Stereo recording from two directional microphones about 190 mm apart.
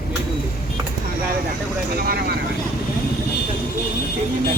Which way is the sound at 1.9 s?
50° right (ahead or behind).